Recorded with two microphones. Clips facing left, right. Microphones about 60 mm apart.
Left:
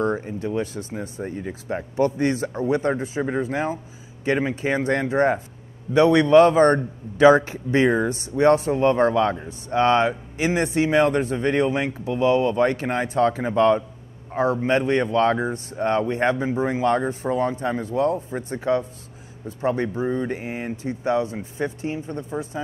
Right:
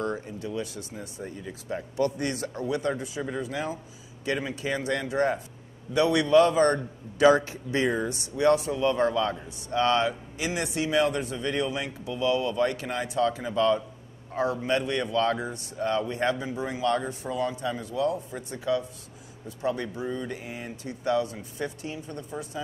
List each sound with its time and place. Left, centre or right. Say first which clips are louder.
0.0 s a sound: left 7 dB; left
0.3 s speech: left 7 dB; left
14.3 s speech: left 6 dB; left